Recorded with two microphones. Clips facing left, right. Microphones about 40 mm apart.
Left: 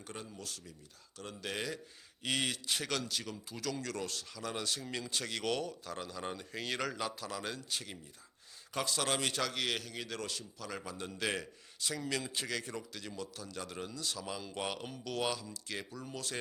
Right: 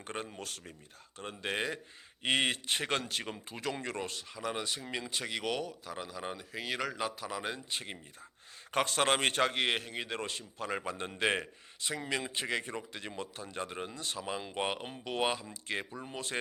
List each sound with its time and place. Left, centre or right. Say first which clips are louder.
0.0 s speech: right 5 dB; right
1.2 s speech: right 4 dB; right
8.7 s speech: right 6 dB; right